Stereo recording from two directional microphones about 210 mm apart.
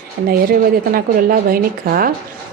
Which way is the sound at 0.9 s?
45° right (ahead or behind).